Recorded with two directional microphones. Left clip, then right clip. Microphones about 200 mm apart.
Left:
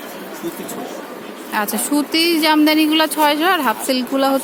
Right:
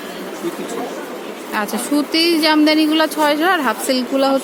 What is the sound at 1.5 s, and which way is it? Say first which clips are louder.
Speech: even; 15° left (ahead or behind).